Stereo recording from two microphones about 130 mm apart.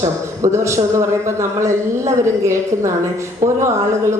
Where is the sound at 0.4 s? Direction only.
20° right (ahead or behind).